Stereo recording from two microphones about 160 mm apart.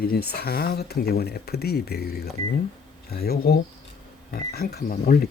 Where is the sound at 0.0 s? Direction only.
75° left (ahead or behind).